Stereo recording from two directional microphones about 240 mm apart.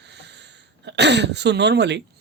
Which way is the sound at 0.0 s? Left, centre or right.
Right.